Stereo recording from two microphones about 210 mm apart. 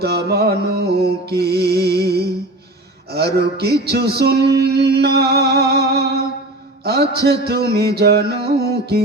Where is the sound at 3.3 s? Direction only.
50° right (ahead or behind).